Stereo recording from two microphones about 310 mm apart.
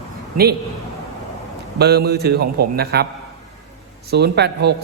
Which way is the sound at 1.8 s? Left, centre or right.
Right.